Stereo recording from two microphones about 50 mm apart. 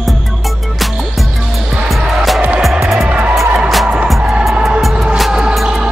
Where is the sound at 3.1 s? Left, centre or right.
Right.